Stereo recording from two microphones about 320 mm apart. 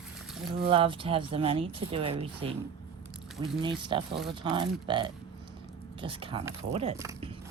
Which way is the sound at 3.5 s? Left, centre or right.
Centre.